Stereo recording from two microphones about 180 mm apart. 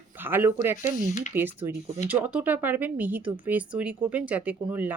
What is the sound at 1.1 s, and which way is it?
Speech, 40° left (ahead or behind).